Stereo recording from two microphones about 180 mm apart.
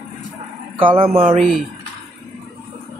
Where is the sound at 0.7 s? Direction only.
30° right (ahead or behind).